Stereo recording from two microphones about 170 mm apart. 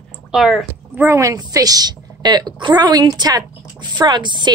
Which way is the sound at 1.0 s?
15° right (ahead or behind).